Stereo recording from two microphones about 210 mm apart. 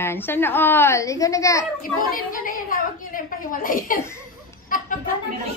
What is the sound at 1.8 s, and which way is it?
A woman's voice, 40° left (ahead or behind).